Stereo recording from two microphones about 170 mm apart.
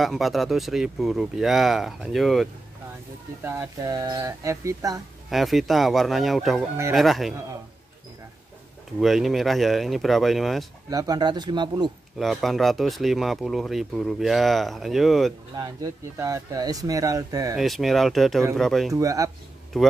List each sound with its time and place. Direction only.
0.0 s speech: centre (ahead or behind)
3.4 s speech: 15° right (ahead or behind)
5.3 s speech: centre (ahead or behind)
9.0 s speech: centre (ahead or behind)
10.9 s speech: 20° right (ahead or behind)
12.2 s speech: centre (ahead or behind)
15.5 s speech: 20° right (ahead or behind)
17.6 s speech: centre (ahead or behind)
18.9 s speech: 20° right (ahead or behind)
19.7 s speech: 5° left (ahead or behind)